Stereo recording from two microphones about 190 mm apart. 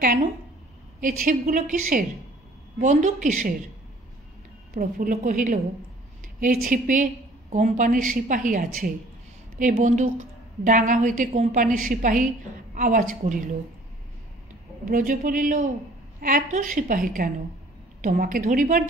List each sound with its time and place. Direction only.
0.0 s a woman's voice: 45° right (ahead or behind)
4.7 s a woman's voice: 45° right (ahead or behind)
14.9 s a woman's voice: 45° right (ahead or behind)